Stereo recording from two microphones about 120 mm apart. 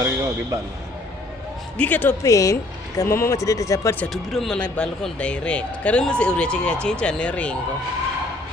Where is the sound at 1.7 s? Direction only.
15° left (ahead or behind).